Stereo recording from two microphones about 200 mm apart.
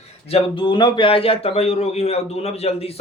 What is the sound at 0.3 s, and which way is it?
A man's voice, 25° left (ahead or behind).